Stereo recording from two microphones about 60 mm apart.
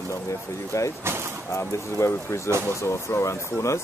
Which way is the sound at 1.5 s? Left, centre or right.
Left.